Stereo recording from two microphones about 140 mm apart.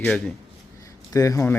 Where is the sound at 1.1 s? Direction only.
25° left (ahead or behind).